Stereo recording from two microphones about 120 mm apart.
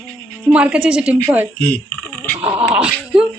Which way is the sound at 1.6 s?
10° left (ahead or behind).